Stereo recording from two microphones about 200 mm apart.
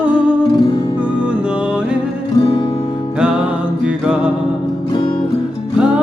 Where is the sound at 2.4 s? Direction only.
25° left (ahead or behind).